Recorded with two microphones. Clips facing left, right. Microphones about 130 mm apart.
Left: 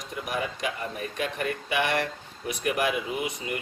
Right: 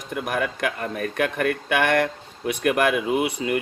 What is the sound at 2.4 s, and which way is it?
Speech, 85° right.